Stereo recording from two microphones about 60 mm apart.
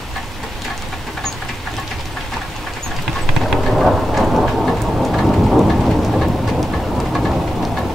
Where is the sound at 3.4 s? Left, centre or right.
Centre.